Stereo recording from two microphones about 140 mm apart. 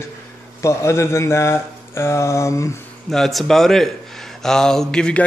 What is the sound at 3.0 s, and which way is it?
A man's voice, centre (ahead or behind).